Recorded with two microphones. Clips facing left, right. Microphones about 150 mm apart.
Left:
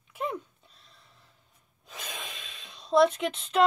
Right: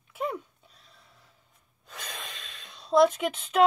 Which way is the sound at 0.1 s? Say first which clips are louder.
Right 1 dB; 5° right (ahead or behind).